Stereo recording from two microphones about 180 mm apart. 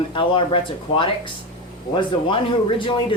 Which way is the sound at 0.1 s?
30° left (ahead or behind).